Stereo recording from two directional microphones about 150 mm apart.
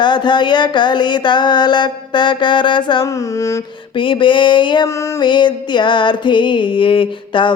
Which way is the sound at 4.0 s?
35° left (ahead or behind).